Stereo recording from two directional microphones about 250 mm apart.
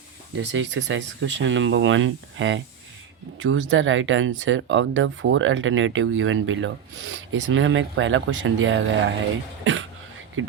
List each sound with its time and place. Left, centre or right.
0.3 s speech: right
10.4 s speech: right